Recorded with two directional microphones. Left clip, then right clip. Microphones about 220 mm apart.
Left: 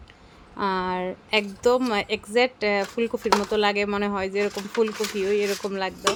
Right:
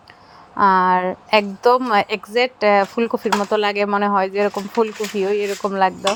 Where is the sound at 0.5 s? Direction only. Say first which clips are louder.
Right 12 dB; 20° right (ahead or behind).